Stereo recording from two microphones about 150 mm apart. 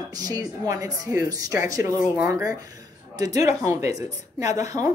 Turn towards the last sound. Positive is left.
turn(degrees=-25)  # may be behind; listen again after turning